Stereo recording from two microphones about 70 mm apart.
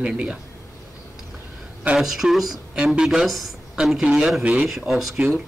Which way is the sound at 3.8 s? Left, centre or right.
Centre.